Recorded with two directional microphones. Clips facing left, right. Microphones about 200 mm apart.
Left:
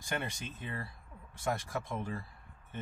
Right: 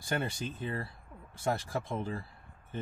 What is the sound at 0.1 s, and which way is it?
Speech, 35° right (ahead or behind).